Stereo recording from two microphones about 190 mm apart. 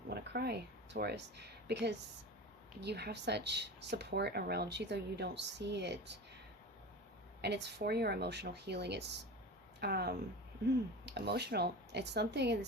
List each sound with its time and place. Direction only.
0.1 s speech: 60° right (ahead or behind)
7.4 s speech: 60° right (ahead or behind)